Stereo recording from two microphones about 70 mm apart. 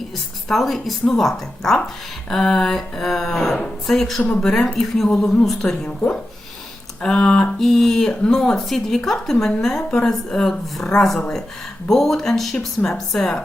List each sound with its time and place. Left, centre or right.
0.4 s speech: centre
4.2 s speech: centre
4.4 s a woman's voice: centre
7.0 s a woman's voice: centre